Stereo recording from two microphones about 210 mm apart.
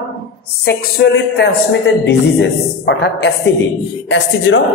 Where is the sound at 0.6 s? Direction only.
55° left (ahead or behind).